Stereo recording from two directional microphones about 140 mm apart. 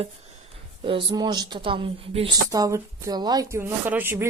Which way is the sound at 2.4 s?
25° right (ahead or behind).